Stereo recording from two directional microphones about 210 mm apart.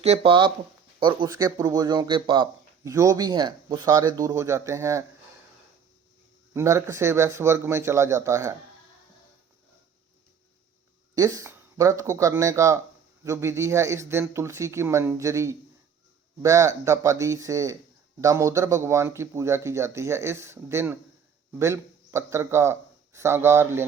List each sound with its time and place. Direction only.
0.0 s speech: 30° right (ahead or behind)
6.5 s speech: 15° right (ahead or behind)
11.1 s a man's voice: 15° right (ahead or behind)